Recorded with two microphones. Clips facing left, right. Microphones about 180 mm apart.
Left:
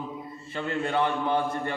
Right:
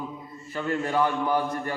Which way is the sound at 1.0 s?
25° left (ahead or behind).